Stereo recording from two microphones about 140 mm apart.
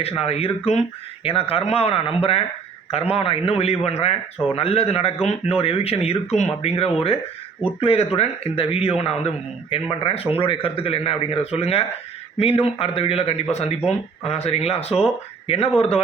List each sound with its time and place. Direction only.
0.2 s a man's voice: 45° left (ahead or behind)